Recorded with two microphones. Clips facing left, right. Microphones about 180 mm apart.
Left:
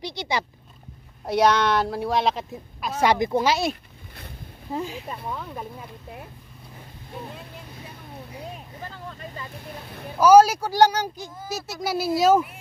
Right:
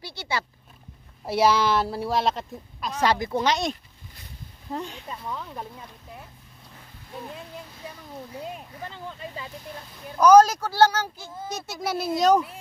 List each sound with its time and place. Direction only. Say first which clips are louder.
0.0 s a sound: left 3 dB; 15° left (ahead or behind)
1.2 s speech: left 1 dB; 5° right (ahead or behind)
3.0 s speech: left 3 dB; 15° left (ahead or behind)
4.7 s speech: left 3 dB; 5° left (ahead or behind)
10.1 s speech: left 1 dB; 10° left (ahead or behind)
11.4 s speech: left 1 dB; centre (ahead or behind)